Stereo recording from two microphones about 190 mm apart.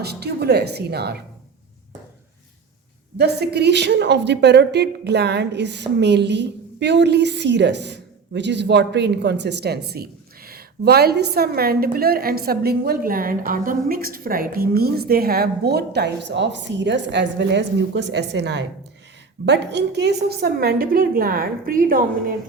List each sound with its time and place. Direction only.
0.0 s a woman's voice: 60° right (ahead or behind)
3.2 s a woman's voice: 60° right (ahead or behind)